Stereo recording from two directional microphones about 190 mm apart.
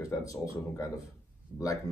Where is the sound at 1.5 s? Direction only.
20° left (ahead or behind).